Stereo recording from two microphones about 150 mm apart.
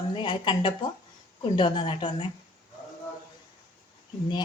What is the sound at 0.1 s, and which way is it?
A woman's voice, 30° left (ahead or behind).